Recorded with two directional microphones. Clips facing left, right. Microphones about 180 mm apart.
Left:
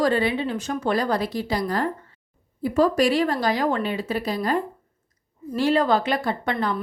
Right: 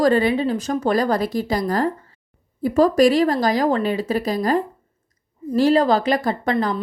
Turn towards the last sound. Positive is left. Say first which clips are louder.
# right 4 dB
turn(degrees=-40)  # may be behind; listen again after turning